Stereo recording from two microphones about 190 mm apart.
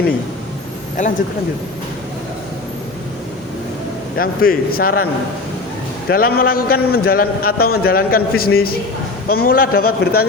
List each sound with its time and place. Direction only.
4.2 s a man's voice: 50° left (ahead or behind)
6.1 s a man's voice: 55° left (ahead or behind)